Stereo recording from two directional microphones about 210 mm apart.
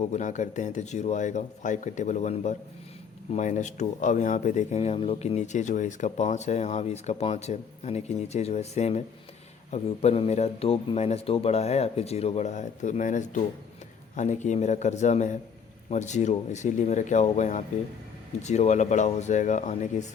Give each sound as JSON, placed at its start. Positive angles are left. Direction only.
{"t": 0.1, "sound": "speech", "side_deg": 35}